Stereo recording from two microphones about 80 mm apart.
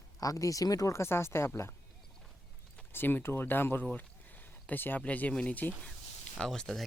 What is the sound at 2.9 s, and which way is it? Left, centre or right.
Speech, left.